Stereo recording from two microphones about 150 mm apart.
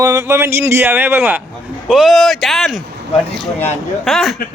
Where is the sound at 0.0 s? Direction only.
20° right (ahead or behind); by 2.8 s centre (ahead or behind).